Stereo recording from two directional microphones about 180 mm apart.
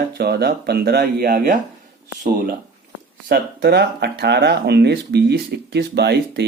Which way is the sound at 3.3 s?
65° right (ahead or behind).